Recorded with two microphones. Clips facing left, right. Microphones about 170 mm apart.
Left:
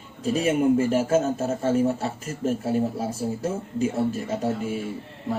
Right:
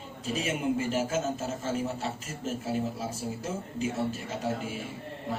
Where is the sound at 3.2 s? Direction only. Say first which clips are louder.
Left 8 dB; 45° left (ahead or behind).